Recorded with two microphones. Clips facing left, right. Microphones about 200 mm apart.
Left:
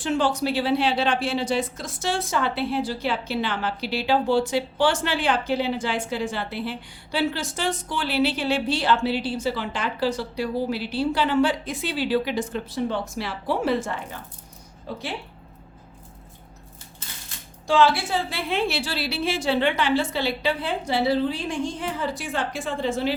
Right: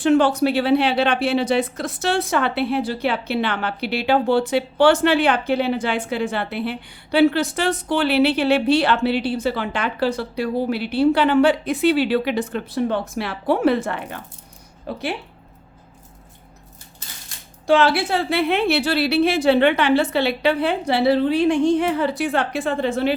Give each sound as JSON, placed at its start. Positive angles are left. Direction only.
{"t": 0.0, "sound": "speech", "side_deg": -60}
{"t": 17.7, "sound": "speech", "side_deg": -65}